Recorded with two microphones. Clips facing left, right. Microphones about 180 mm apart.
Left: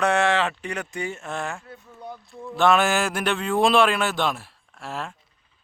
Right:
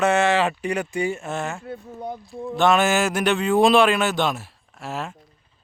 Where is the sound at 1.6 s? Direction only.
35° right (ahead or behind).